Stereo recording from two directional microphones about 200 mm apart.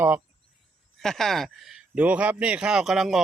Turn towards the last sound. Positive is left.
turn(degrees=0)  # may be behind; listen again after turning